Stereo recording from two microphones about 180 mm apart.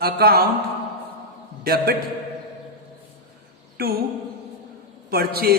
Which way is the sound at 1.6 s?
60° right (ahead or behind).